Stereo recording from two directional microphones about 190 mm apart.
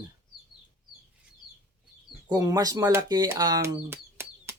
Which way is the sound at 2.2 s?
20° right (ahead or behind).